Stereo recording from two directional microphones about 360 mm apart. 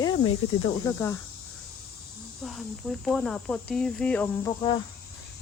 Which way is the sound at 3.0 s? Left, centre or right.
Centre.